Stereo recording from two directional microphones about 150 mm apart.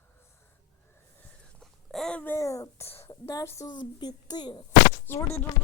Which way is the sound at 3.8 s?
30° left (ahead or behind).